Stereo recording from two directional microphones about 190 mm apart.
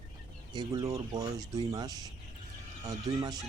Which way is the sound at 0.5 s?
20° right (ahead or behind).